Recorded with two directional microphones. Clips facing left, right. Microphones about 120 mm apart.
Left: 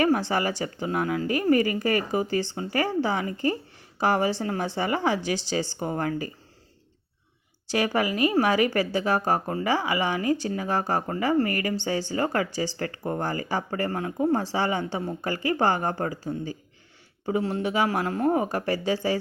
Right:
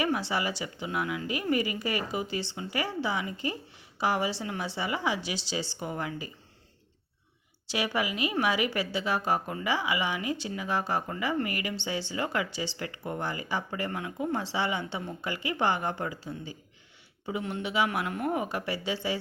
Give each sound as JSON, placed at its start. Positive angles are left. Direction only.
{"t": 0.0, "sound": "speech", "side_deg": 45}
{"t": 7.7, "sound": "speech", "side_deg": 45}